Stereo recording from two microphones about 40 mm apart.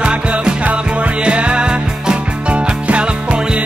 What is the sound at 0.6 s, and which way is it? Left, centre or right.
Music, right.